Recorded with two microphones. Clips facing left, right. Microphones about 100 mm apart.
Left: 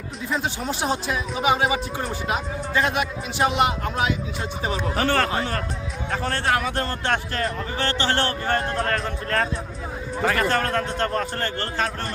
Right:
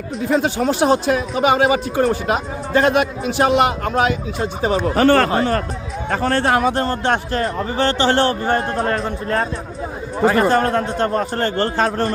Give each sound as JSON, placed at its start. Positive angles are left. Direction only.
{"t": 0.3, "sound": "speech", "side_deg": -85}
{"t": 4.4, "sound": "speech", "side_deg": -35}
{"t": 4.8, "sound": "speech", "side_deg": -55}
{"t": 6.3, "sound": "speech", "side_deg": -30}